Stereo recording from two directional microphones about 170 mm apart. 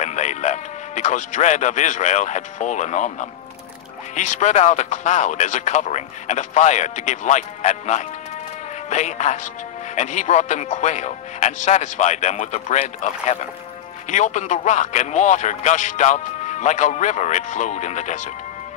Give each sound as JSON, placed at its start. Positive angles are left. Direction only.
{"t": 0.0, "sound": "a man's voice", "side_deg": 45}